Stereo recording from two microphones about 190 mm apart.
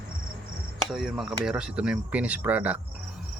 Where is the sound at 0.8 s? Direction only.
Centre (ahead or behind).